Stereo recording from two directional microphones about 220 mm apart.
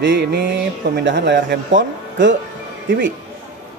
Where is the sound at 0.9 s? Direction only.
55° right (ahead or behind).